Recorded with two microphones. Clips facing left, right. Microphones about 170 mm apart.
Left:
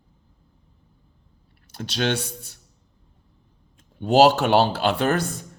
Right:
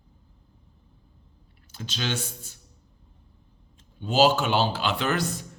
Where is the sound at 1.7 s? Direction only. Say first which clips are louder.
Left 7 dB; 60° left (ahead or behind).